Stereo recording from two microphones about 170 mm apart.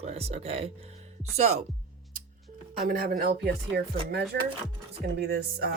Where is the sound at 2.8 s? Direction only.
60° right (ahead or behind).